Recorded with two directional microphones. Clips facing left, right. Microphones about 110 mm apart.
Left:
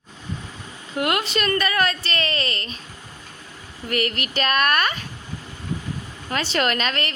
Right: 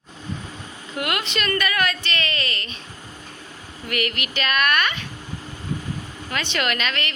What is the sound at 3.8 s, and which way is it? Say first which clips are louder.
Speech: left 2 dB; 35° left (ahead or behind).